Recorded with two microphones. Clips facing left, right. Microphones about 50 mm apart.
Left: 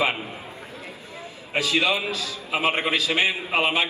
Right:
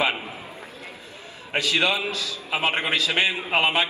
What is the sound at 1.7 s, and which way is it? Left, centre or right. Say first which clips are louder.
Speech: even; right.